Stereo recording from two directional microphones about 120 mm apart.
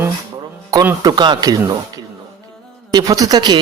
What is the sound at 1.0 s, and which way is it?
Speech, 35° right (ahead or behind).